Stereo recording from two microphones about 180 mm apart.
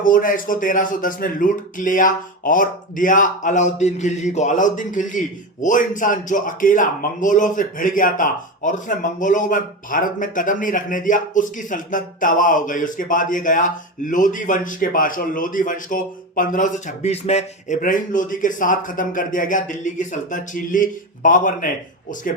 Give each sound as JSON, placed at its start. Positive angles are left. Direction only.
{"t": 0.0, "sound": "speech", "side_deg": 50}